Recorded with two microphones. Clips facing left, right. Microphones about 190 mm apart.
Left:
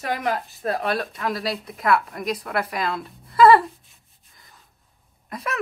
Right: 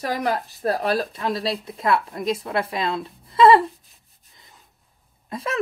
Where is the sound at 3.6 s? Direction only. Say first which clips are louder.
Right 4 dB; centre (ahead or behind).